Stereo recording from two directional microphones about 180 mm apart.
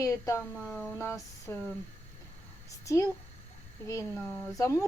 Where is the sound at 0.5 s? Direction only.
Centre (ahead or behind).